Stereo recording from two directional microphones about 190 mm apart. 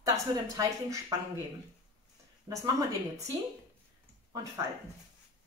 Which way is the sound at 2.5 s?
15° right (ahead or behind).